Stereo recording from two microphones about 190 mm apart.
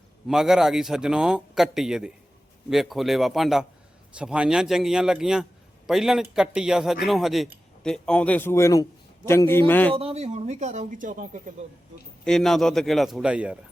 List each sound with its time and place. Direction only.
0.3 s a man's voice: centre (ahead or behind)
9.9 s speech: 30° right (ahead or behind)
12.2 s a man's voice: centre (ahead or behind)